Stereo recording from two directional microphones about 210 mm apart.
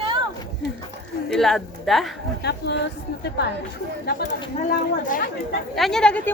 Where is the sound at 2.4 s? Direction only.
55° left (ahead or behind).